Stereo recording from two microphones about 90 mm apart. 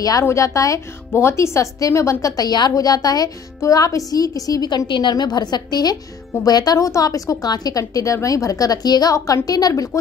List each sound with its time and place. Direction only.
0.2 s a woman's voice: 35° left (ahead or behind)